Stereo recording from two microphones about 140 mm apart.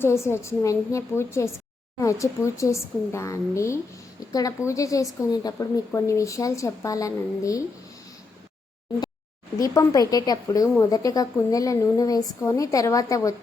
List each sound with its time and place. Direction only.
0.0 s a woman's voice: 20° left (ahead or behind)
9.6 s a woman's voice: 25° left (ahead or behind)